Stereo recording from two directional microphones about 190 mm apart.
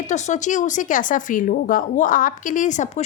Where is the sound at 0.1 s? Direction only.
40° left (ahead or behind).